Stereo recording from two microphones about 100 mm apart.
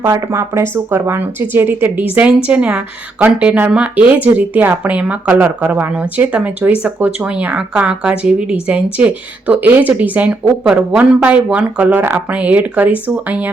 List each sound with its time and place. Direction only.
0.0 s a woman's voice: 30° right (ahead or behind)